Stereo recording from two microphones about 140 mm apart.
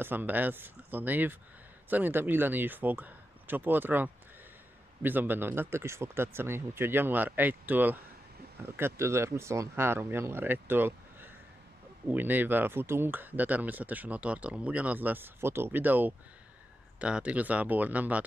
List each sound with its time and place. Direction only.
0.0 s speech: 15° right (ahead or behind)